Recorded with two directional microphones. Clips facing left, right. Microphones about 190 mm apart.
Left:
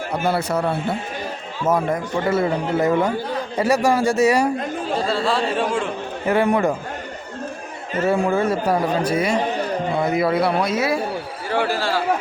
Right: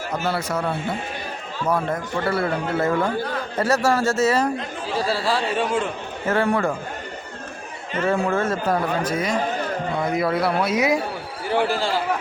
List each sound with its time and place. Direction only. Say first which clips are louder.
1.6 s speech: left 3 dB; 20° left (ahead or behind)
4.9 s a man's voice: left 1 dB; 5° right (ahead or behind)
6.2 s speech: left 3 dB; 15° left (ahead or behind)
8.0 s a man's voice: left 3 dB; 10° left (ahead or behind); by 11.0 s 15° right (ahead or behind)